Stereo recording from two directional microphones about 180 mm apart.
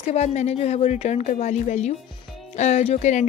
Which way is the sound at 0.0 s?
35° left (ahead or behind).